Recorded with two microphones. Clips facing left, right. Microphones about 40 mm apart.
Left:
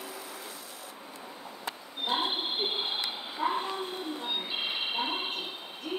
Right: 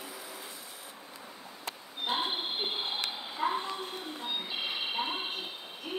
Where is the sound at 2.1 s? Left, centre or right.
Centre.